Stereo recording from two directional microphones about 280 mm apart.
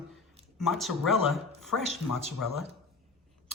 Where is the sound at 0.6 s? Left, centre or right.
Centre.